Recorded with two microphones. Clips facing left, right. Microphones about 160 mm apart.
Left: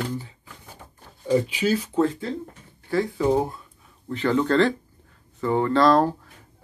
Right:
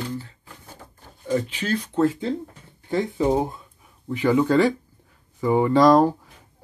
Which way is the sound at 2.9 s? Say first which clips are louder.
Even; 20° right (ahead or behind).